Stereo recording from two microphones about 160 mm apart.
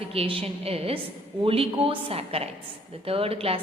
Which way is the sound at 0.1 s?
35° right (ahead or behind).